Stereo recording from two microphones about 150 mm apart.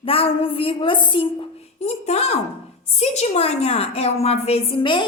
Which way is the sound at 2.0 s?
45° left (ahead or behind).